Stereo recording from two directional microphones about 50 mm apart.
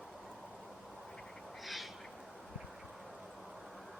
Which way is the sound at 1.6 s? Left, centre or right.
Centre.